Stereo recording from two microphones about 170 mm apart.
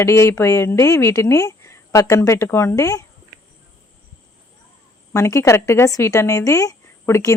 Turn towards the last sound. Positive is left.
turn(degrees=15)  # may be behind; listen again after turning